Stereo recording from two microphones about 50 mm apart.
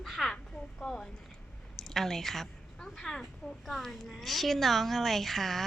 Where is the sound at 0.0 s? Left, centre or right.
Centre.